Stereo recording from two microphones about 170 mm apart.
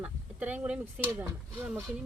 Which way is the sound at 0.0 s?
10° right (ahead or behind).